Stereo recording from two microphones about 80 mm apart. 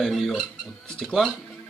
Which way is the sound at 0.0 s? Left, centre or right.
Centre.